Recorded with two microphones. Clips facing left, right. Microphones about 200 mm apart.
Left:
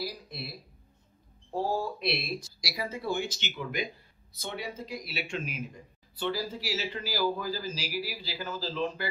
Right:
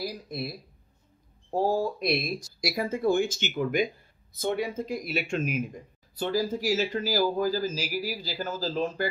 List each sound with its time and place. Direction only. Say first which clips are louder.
1.5 s a man's voice: right 5 dB; 45° right (ahead or behind)